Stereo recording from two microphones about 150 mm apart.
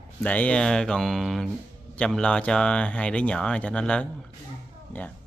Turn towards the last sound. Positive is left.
turn(degrees=10)  # may be behind; listen again after turning